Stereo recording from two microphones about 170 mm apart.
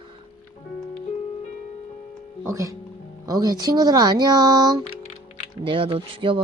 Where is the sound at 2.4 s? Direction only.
20° right (ahead or behind).